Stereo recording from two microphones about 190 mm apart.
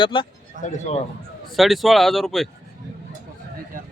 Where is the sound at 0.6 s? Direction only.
40° left (ahead or behind).